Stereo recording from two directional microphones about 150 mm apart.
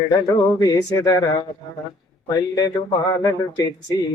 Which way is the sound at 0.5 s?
25° left (ahead or behind).